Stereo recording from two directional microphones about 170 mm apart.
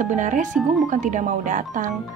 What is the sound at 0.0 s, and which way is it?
Speech, 50° right (ahead or behind).